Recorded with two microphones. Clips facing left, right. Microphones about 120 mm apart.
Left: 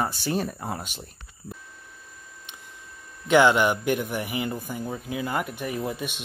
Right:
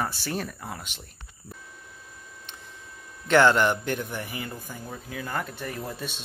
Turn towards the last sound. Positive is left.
turn(degrees=15)  # may be behind; listen again after turning